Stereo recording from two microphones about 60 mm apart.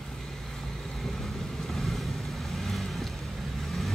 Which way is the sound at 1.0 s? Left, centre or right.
Centre.